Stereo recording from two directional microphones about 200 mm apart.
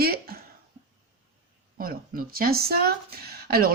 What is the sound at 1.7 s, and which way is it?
Speech, 45° right (ahead or behind).